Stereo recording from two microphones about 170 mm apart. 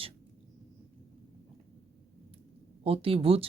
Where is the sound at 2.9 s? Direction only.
35° right (ahead or behind).